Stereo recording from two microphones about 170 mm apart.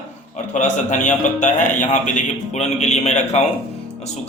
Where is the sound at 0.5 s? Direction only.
45° left (ahead or behind).